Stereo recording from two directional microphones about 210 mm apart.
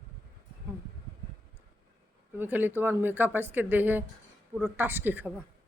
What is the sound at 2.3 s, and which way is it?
A woman's voice, 10° right (ahead or behind).